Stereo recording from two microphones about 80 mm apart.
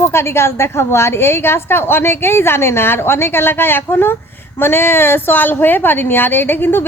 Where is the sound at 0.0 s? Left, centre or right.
Left.